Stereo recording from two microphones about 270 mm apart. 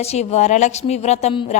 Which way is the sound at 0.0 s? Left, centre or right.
Left.